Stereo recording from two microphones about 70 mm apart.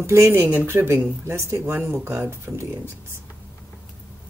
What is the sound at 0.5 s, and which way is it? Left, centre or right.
Speech, right.